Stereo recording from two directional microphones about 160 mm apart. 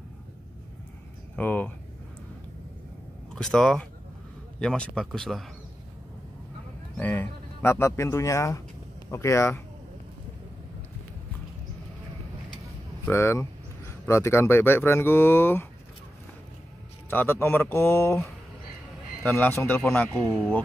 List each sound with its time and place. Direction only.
1.3 s speech: 10° left (ahead or behind)
3.3 s a man's voice: 5° left (ahead or behind)
7.0 s speech: 10° left (ahead or behind)
13.0 s speech: 15° left (ahead or behind)
17.1 s speech: 10° left (ahead or behind)
19.2 s speech: 10° left (ahead or behind)